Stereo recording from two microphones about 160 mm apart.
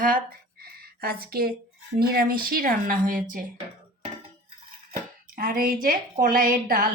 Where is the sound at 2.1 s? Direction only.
65° right (ahead or behind).